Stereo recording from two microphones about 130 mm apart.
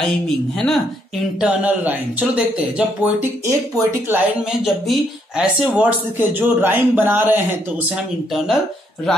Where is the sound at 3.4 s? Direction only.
20° right (ahead or behind).